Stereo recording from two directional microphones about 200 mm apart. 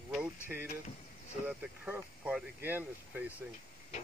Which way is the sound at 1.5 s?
5° right (ahead or behind).